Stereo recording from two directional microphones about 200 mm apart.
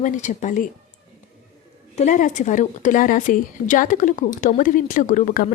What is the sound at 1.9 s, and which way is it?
A woman's voice, 35° left (ahead or behind).